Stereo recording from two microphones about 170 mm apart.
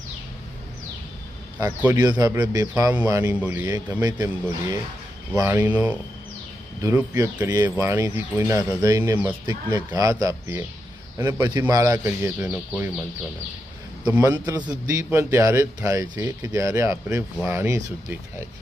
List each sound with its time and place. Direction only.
2.0 s a man's voice: 20° right (ahead or behind)
14.2 s a man's voice: 15° right (ahead or behind)